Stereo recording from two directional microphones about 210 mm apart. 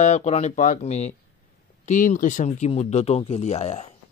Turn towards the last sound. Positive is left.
turn(degrees=30)  # may be behind; listen again after turning